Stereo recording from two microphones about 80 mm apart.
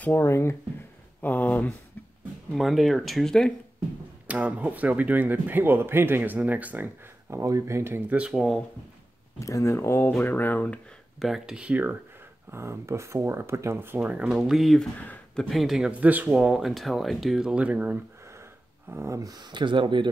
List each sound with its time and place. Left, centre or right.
0.0 s speech: left
1.2 s speech: centre
2.5 s speech: centre
4.3 s speech: centre
7.2 s speech: right
8.2 s speech: centre
9.4 s speech: left
11.1 s speech: centre
12.4 s speech: right
14.0 s speech: centre
14.3 s speech: centre
15.9 s speech: centre
18.2 s a sound: right
19.4 s speech: right